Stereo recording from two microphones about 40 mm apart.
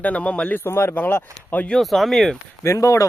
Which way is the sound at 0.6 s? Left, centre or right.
Left.